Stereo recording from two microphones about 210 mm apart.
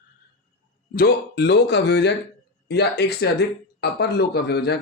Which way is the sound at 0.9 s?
50° left (ahead or behind).